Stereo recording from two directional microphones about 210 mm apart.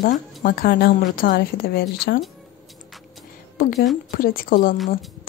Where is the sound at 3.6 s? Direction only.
45° left (ahead or behind).